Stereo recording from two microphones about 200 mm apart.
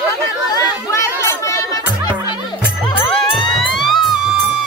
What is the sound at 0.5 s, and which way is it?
Chatter, 15° left (ahead or behind).